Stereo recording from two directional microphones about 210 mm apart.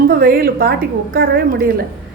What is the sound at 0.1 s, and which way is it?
Speech, 45° right (ahead or behind).